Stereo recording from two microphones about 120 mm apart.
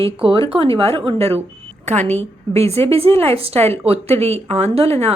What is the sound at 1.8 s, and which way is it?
Speech, 80° right.